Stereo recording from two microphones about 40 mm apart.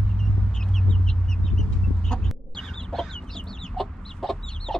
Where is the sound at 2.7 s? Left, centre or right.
Centre.